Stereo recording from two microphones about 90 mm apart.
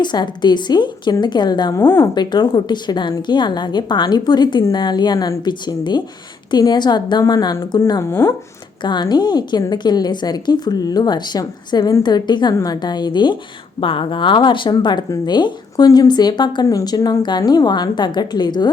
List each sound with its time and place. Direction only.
0.0 s a woman's voice: 55° left (ahead or behind)
1.8 s speech: 20° left (ahead or behind)
2.1 s a woman's voice: 55° left (ahead or behind)
8.0 s speech: 30° left (ahead or behind)
8.8 s a woman's voice: 55° left (ahead or behind)
13.8 s a woman's voice: 75° left (ahead or behind); by 18.7 s 55° left (ahead or behind)